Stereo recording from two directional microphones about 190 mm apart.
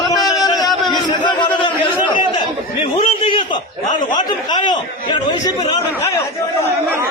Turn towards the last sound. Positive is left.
turn(degrees=15)  # may be behind; listen again after turning